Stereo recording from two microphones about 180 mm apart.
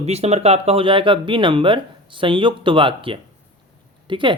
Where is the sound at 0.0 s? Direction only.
35° right (ahead or behind).